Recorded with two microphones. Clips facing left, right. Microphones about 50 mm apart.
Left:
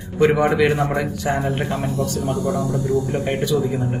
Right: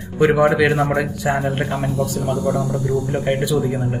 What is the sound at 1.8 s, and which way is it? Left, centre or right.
Speech, centre.